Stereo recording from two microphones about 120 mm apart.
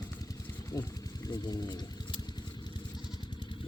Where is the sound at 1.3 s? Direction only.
35° left (ahead or behind).